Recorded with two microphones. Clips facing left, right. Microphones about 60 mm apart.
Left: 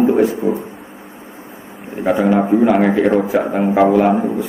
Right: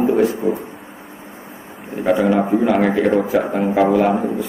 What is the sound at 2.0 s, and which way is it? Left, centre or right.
A man's voice, centre.